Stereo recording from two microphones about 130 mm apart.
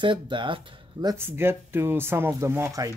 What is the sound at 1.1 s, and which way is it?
Speech, 20° right (ahead or behind).